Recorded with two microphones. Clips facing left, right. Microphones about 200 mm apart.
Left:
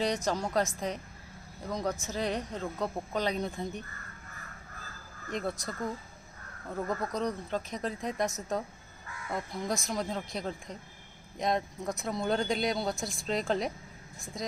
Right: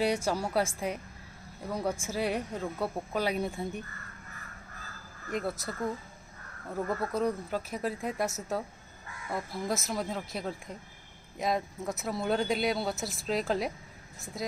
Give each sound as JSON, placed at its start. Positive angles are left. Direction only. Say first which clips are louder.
{"t": 0.0, "sound": "speech", "louder": "right 1 dB", "side_deg": -10}
{"t": 5.3, "sound": "speech", "louder": "right 1 dB", "side_deg": -5}
{"t": 6.9, "sound": "speech", "louder": "right 3 dB", "side_deg": -5}